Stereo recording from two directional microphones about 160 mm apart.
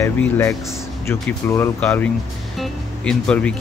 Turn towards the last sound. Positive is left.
turn(degrees=5)  # may be behind; listen again after turning